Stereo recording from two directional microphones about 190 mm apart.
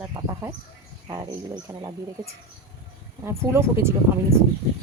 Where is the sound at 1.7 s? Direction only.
15° right (ahead or behind).